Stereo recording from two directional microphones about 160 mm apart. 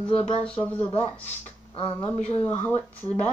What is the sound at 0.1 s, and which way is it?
Speech, 40° left (ahead or behind).